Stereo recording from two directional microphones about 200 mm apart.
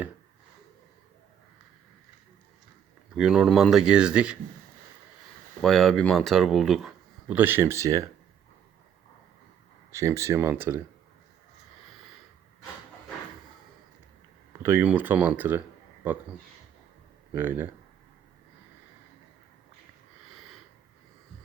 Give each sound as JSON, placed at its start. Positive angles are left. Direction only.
{"t": 3.2, "sound": "speech", "side_deg": 0}
{"t": 5.6, "sound": "speech", "side_deg": 0}
{"t": 9.9, "sound": "speech", "side_deg": -15}
{"t": 14.6, "sound": "speech", "side_deg": -10}
{"t": 17.3, "sound": "speech", "side_deg": -10}